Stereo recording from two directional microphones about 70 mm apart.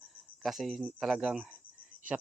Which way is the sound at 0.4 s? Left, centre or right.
Centre.